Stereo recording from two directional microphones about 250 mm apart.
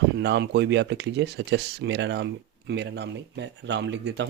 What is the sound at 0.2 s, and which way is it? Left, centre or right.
Speech, right.